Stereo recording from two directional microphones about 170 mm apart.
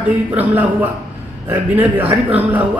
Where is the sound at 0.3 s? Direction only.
10° right (ahead or behind).